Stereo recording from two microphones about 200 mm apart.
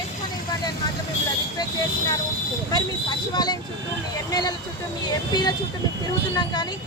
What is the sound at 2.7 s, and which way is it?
Speech, 20° left (ahead or behind).